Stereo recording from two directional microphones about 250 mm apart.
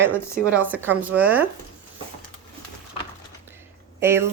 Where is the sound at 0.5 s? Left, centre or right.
Centre.